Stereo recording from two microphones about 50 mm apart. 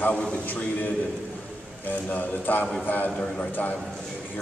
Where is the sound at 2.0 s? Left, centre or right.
Left.